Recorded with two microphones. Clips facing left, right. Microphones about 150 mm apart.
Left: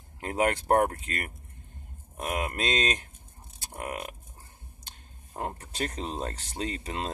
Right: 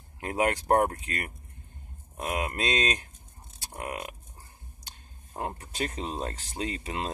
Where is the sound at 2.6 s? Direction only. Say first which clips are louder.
Even; 30° left (ahead or behind).